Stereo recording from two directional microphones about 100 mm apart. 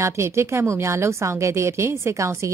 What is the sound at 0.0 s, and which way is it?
A woman's voice, 25° right (ahead or behind).